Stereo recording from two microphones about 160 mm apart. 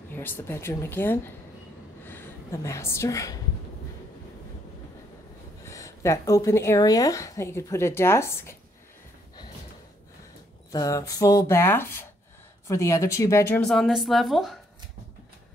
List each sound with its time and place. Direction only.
0.1 s a woman's voice: 10° left (ahead or behind)
5.7 s speech: 20° left (ahead or behind)
10.7 s speech: 20° left (ahead or behind)
13.6 s a woman's voice: centre (ahead or behind)